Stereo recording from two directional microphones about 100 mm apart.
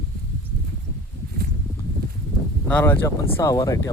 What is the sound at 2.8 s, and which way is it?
Speech, 25° left (ahead or behind).